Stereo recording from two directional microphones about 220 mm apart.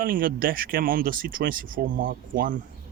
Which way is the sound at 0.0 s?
40° right (ahead or behind).